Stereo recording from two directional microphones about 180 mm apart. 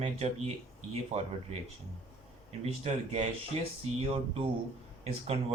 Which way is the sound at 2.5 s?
40° right (ahead or behind).